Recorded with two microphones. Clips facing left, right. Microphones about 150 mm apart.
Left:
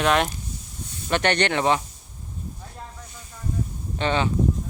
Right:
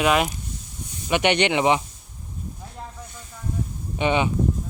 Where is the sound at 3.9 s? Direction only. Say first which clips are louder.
Right 2 dB; 15° right (ahead or behind).